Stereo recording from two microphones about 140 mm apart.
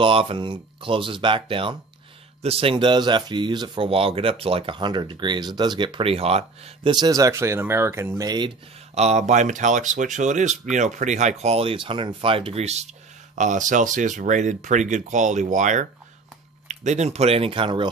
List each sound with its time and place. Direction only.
0.0 s speech: 40° right (ahead or behind)
6.9 s speech: 25° right (ahead or behind)
8.9 s speech: 55° right (ahead or behind); by 17.8 s 35° right (ahead or behind)